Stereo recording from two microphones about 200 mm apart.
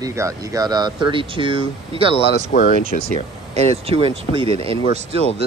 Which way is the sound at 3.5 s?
30° right (ahead or behind).